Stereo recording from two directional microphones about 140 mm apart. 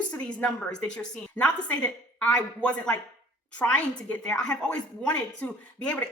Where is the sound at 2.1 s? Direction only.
10° left (ahead or behind).